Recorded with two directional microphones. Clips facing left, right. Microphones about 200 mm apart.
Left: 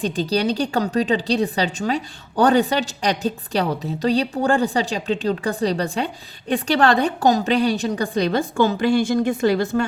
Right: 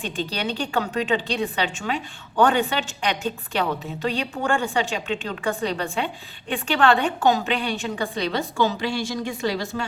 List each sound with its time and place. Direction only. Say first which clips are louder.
0.0 s a woman's voice: left 7 dB; 40° left (ahead or behind)